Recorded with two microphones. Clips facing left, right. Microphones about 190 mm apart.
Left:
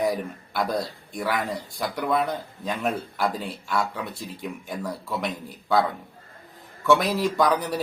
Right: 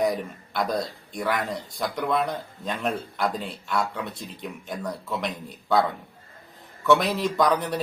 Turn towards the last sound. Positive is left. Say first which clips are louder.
# left 1 dB
turn(degrees=0)  # may be behind; listen again after turning